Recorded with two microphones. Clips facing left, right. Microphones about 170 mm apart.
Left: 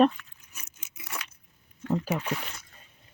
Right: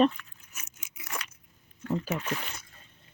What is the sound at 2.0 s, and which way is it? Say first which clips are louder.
Speech: left 2 dB; 10° left (ahead or behind).